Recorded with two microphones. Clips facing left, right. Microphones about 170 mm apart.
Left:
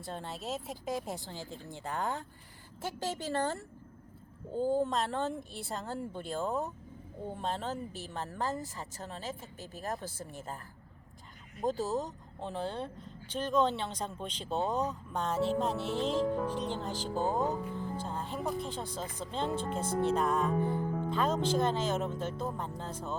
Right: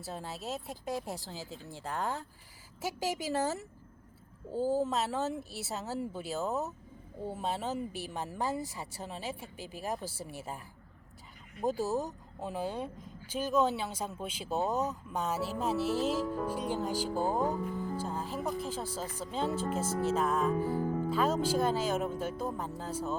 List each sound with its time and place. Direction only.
0.0 s speech: 5° right (ahead or behind)
11.6 s speech: 10° right (ahead or behind)